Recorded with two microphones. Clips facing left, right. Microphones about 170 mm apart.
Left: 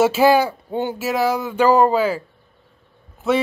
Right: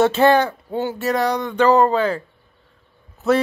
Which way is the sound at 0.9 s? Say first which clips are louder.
Even; 5° left (ahead or behind).